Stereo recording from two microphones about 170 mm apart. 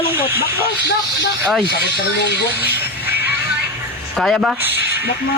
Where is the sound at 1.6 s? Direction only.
80° left.